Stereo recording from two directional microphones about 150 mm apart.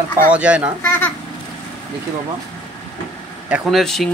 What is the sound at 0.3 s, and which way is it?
Speech, 10° right (ahead or behind).